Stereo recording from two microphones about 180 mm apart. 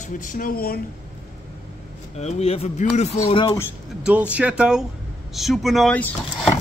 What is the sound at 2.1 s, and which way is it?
Speech, 35° left (ahead or behind).